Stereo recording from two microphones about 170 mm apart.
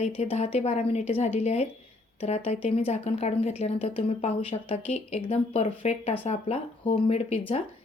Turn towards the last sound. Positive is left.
turn(degrees=40)  # may be behind; listen again after turning